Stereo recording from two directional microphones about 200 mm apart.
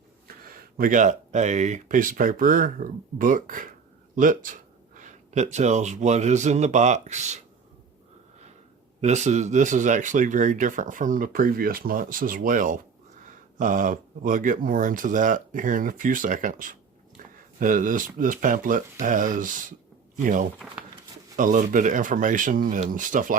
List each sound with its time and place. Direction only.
0.4 s speech: 45° right (ahead or behind)
9.0 s speech: 35° right (ahead or behind)